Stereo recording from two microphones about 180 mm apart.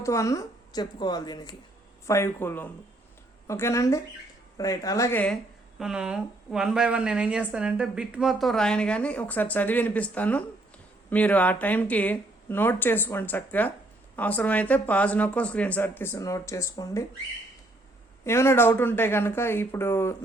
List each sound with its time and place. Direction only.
0.0 s a woman's voice: 15° left (ahead or behind)
5.8 s a woman's voice: 5° right (ahead or behind); by 17.1 s 20° left (ahead or behind)
18.3 s speech: 15° left (ahead or behind)